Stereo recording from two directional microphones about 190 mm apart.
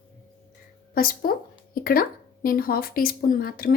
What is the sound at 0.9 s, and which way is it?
Speech, 50° left (ahead or behind).